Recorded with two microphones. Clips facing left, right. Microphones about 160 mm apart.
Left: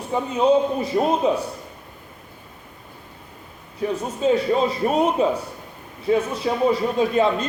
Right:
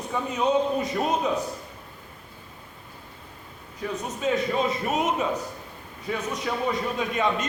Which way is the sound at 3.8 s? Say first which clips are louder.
Left 7 dB; 30° left (ahead or behind).